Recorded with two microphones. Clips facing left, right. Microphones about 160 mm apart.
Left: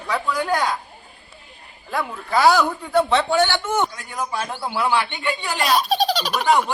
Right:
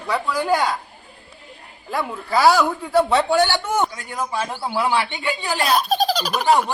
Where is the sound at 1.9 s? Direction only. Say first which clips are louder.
Right 1 dB; centre (ahead or behind).